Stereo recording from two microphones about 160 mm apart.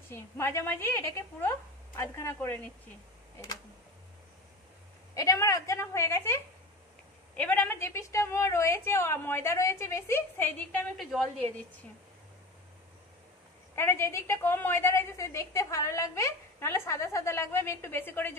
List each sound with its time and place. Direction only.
0.1 s a woman's voice: 15° left (ahead or behind)
5.1 s a woman's voice: 20° left (ahead or behind)
11.0 s a woman's voice: centre (ahead or behind)
13.7 s a woman's voice: 15° left (ahead or behind)